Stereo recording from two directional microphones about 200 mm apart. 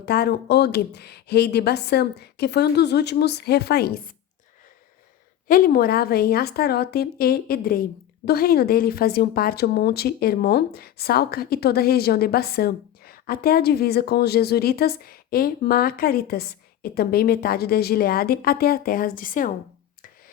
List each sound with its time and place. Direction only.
0.0 s speech: 50° left (ahead or behind)
5.5 s a woman's voice: 45° left (ahead or behind)